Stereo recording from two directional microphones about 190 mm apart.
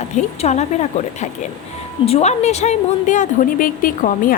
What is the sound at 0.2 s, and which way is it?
Speech, 35° left (ahead or behind).